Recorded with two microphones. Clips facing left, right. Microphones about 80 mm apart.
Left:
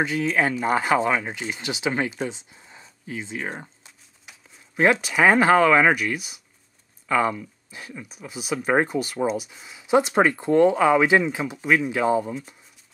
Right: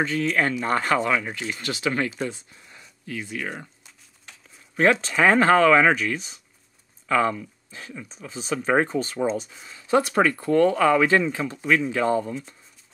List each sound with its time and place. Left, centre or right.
0.0 s speech: centre
4.3 s a sound: centre
5.0 s speech: centre